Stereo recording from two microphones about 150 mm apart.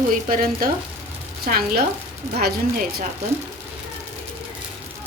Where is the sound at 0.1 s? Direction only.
70° right (ahead or behind).